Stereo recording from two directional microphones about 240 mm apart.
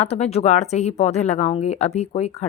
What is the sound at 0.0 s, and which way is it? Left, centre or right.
Speech, left.